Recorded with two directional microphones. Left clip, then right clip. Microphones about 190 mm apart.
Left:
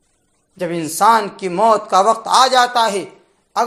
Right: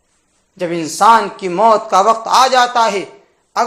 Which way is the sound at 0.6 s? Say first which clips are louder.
Right 2 dB; 20° left (ahead or behind).